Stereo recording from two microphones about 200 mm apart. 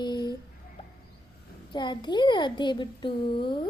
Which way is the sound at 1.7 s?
20° left (ahead or behind).